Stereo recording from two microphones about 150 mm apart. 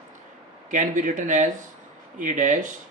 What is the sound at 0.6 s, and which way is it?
Speech, 60° right (ahead or behind).